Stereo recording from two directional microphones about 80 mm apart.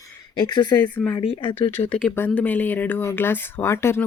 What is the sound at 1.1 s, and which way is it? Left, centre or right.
Speech, left.